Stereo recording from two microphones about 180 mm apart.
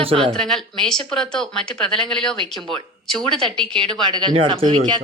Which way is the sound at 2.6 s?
25° right (ahead or behind).